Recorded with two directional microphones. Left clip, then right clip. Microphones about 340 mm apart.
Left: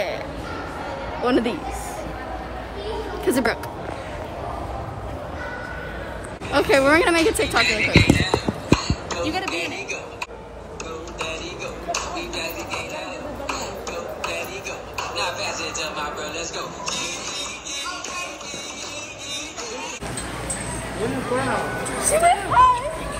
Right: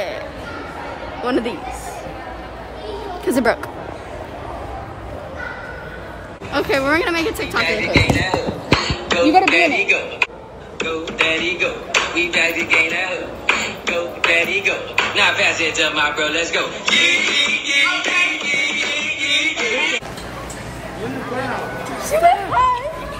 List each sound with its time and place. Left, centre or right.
1.2 s a woman's voice: centre
3.3 s speech: centre
6.5 s a woman's voice: centre
7.9 s music: right
9.4 s speech: right
10.8 s music: right
22.0 s speech: centre